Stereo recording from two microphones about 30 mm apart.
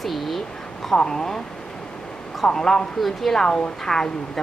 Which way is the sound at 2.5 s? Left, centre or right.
Left.